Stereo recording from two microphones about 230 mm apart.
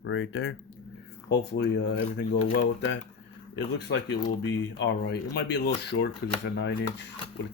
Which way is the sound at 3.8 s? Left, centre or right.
Left.